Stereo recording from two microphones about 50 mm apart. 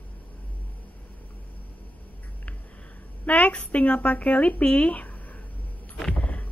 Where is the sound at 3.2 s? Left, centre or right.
Left.